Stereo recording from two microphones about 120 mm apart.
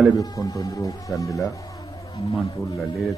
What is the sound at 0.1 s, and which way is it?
Speech, 30° left (ahead or behind).